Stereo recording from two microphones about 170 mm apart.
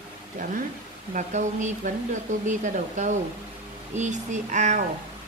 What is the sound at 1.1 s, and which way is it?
Speech, 45° right (ahead or behind).